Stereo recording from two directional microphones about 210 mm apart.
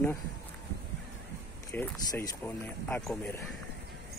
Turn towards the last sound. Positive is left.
turn(degrees=5)  # may be behind; listen again after turning